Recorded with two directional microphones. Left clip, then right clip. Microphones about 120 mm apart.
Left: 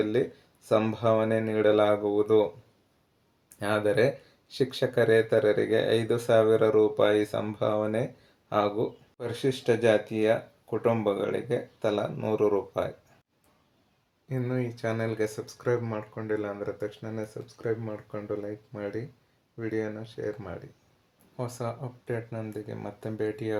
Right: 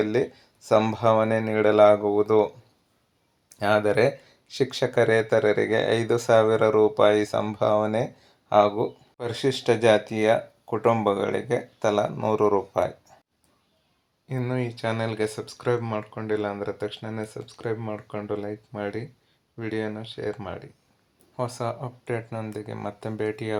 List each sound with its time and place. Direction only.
0.0 s speech: 25° right (ahead or behind)
3.6 s speech: 25° right (ahead or behind)
14.3 s speech: 25° right (ahead or behind)